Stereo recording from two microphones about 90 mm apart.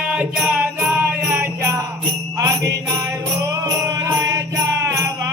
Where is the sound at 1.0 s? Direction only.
25° right (ahead or behind).